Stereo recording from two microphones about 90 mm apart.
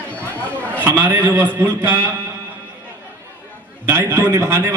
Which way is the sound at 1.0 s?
20° right (ahead or behind).